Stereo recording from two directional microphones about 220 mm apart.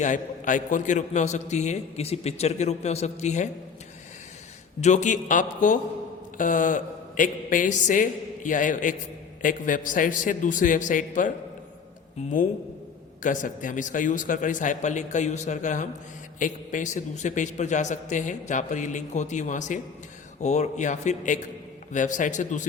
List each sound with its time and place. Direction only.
0.0 s a man's voice: 35° left (ahead or behind)
4.8 s a man's voice: 35° left (ahead or behind)
6.3 s mantra: 35° left (ahead or behind)
9.4 s a man's voice: 40° left (ahead or behind)
13.2 s a man's voice: 35° left (ahead or behind)